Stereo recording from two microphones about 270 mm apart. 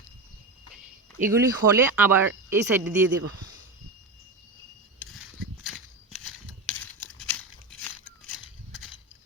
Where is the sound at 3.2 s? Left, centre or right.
Right.